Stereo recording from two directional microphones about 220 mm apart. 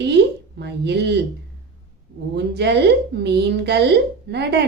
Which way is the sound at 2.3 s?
50° right (ahead or behind).